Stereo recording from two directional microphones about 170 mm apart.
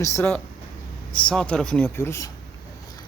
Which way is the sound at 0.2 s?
15° left (ahead or behind).